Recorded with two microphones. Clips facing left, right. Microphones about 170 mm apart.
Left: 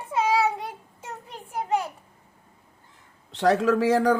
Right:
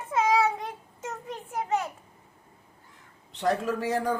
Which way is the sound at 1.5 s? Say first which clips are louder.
Left 2 dB; 30° left (ahead or behind).